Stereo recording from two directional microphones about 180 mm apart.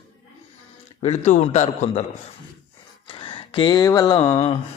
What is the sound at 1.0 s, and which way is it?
A man's voice, 40° left (ahead or behind).